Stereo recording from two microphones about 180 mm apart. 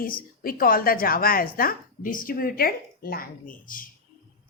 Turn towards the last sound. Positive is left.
turn(degrees=50)  # may be behind; listen again after turning